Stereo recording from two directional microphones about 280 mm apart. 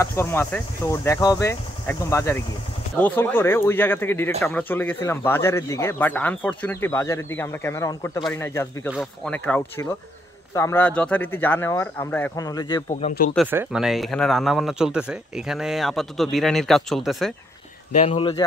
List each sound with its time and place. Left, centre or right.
0.0 s speech: centre
13.0 s speech: left
13.3 s speech: centre
17.9 s speech: left